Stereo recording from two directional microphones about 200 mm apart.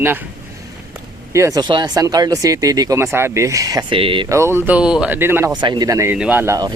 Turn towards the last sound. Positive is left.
turn(degrees=-15)  # may be behind; listen again after turning